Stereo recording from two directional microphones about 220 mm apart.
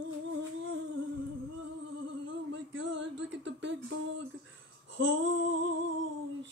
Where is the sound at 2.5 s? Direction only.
55° right (ahead or behind).